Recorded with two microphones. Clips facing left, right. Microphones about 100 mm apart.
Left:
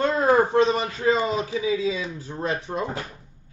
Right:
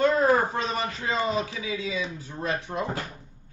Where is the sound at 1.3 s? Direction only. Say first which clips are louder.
Left 5 dB; 30° left (ahead or behind).